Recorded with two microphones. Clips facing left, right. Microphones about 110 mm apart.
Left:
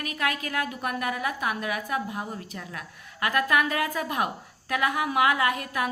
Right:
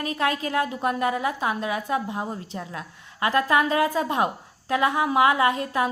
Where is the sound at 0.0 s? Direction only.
30° right (ahead or behind).